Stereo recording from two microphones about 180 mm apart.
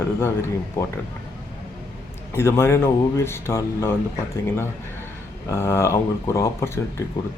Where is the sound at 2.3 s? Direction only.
15° left (ahead or behind).